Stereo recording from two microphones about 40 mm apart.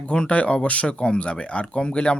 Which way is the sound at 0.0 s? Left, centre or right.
Left.